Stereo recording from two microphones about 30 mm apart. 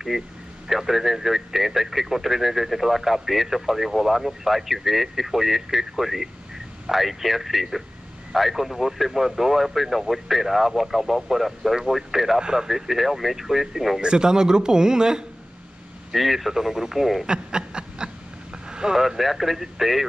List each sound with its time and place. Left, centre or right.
0.1 s a man's voice: centre
12.4 s a man's voice: right
12.6 s speech: centre
14.0 s a man's voice: right
16.1 s a man's voice: centre
17.3 s a sound: right
18.7 s vehicle: right
18.9 s speech: centre